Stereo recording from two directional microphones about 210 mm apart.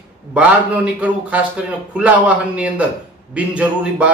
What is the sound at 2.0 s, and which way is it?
A man's voice, 5° right (ahead or behind).